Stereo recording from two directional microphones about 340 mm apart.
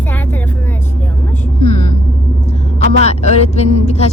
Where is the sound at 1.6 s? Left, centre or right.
Centre.